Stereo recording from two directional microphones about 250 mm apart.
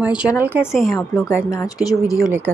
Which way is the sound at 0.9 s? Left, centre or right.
Centre.